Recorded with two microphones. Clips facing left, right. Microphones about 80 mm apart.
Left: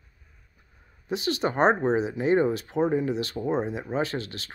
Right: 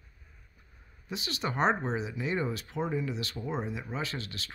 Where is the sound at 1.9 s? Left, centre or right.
Left.